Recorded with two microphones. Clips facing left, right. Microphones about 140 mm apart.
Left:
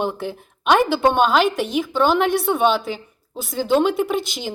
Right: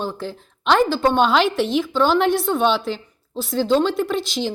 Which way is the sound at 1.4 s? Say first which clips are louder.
Right 1 dB; 50° left (ahead or behind).